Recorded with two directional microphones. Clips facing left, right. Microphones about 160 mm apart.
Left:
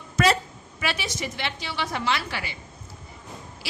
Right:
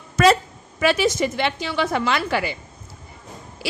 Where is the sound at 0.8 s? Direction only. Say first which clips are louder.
Right 11 dB; 45° right (ahead or behind).